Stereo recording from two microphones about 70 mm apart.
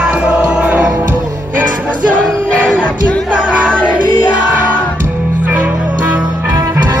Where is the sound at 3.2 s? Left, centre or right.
Right.